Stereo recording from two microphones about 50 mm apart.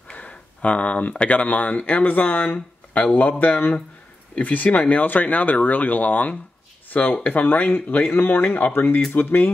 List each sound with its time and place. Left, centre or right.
0.1 s speech: left
8.1 s speech: left
8.5 s speech: left
8.7 s speech: left